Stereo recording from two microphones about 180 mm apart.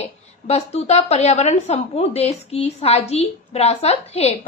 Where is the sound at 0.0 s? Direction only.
35° left (ahead or behind).